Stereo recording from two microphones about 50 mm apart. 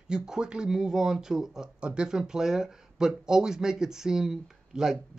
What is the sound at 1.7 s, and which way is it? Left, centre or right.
Speech, right.